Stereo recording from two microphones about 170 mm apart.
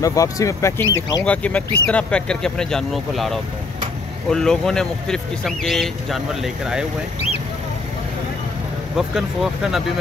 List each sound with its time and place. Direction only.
0.0 s speech: 20° left (ahead or behind)
1.2 s speech: 5° left (ahead or behind)
8.9 s speech: 5° right (ahead or behind)